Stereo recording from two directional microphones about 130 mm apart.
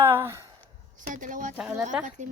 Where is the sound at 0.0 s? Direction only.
20° right (ahead or behind).